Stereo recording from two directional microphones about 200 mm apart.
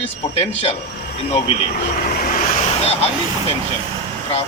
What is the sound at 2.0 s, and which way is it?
Vehicle, 45° left (ahead or behind).